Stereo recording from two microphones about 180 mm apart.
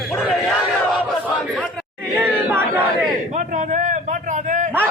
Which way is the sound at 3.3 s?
45° right (ahead or behind).